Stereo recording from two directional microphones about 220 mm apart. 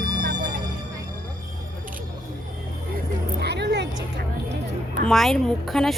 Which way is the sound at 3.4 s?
50° right (ahead or behind).